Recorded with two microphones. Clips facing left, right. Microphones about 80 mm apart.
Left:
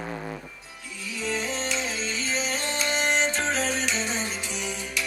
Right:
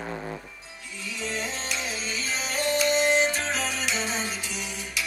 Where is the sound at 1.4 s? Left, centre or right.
Left.